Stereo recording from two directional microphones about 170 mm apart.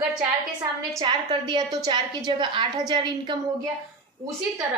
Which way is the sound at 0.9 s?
30° right (ahead or behind).